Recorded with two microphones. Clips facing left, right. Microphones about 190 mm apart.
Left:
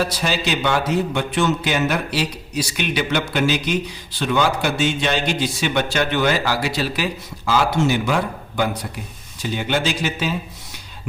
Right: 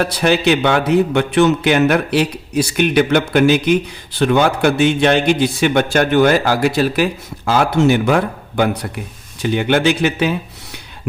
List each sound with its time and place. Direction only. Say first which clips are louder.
0.0 s speech: right 7 dB; 60° right (ahead or behind)